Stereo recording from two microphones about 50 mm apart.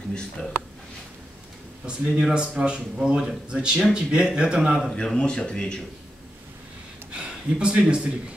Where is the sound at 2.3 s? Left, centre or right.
Centre.